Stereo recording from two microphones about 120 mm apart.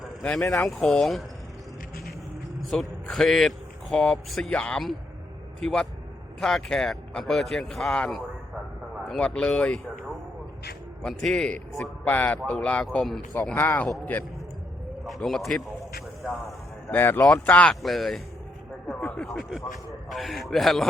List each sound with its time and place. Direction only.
0.6 s a man's voice: centre (ahead or behind)
2.6 s a man's voice: centre (ahead or behind)
11.0 s a man's voice: 5° left (ahead or behind)
15.0 s a sound: centre (ahead or behind)
16.9 s a man's voice: 15° left (ahead or behind)